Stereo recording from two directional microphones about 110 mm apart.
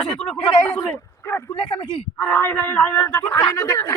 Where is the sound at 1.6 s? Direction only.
50° left (ahead or behind).